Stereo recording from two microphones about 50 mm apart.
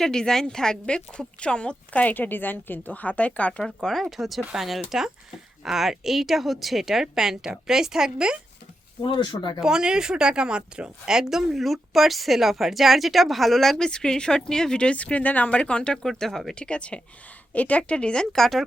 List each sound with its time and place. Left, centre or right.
0.0 s speech: centre; by 3.5 s left
4.0 s speech: centre
9.6 s speech: centre
16.6 s speech: left
18.3 s speech: centre